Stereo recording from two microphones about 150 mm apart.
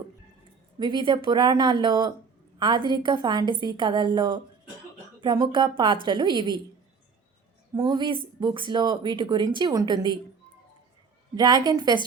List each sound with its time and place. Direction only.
0.8 s a woman's voice: 30° right (ahead or behind)
7.8 s speech: 25° right (ahead or behind)
11.3 s speech: 25° right (ahead or behind)